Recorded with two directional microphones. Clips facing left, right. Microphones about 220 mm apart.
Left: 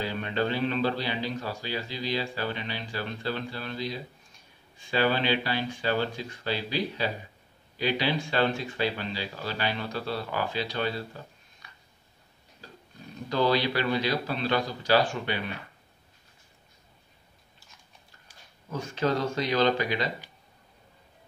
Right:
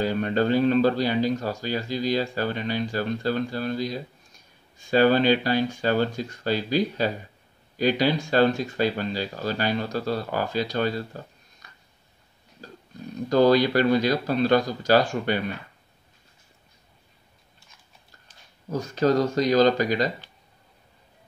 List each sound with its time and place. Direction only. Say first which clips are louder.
0.0 s a man's voice: right 6 dB; 45° right (ahead or behind)
11.6 s a sound: right 1 dB; 45° right (ahead or behind)
13.3 s a man's voice: right 7 dB; 45° right (ahead or behind)
18.7 s speech: right 6 dB; 40° right (ahead or behind)